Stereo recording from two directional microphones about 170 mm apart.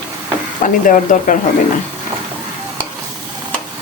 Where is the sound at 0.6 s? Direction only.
50° left (ahead or behind).